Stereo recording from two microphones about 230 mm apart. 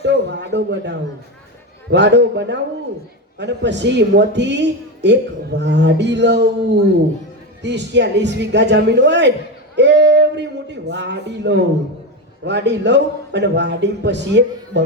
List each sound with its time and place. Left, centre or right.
0.0 s a man's voice: right
7.6 s a man's voice: right